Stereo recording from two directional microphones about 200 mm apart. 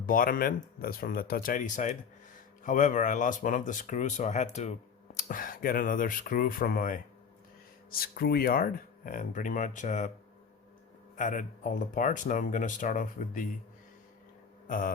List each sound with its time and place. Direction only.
0.0 s speech: 45° left (ahead or behind)
11.2 s speech: 40° left (ahead or behind)
14.7 s speech: 45° left (ahead or behind)